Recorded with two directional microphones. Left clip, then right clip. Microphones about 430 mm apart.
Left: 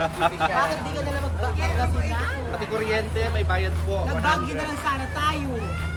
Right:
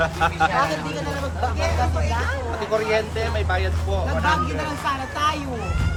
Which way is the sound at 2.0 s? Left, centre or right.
Centre.